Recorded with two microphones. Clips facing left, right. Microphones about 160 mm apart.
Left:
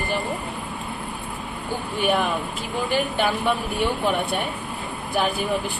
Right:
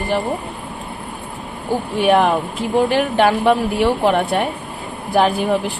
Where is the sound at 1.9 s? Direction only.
80° right.